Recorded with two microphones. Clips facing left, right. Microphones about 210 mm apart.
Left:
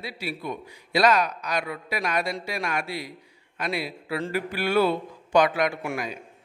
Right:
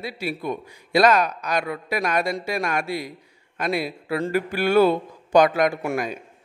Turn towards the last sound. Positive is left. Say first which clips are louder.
# right 5 dB
turn(degrees=-45)  # may be behind; listen again after turning